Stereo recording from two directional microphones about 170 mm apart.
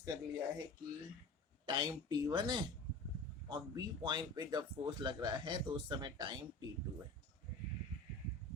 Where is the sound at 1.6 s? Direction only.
25° right (ahead or behind).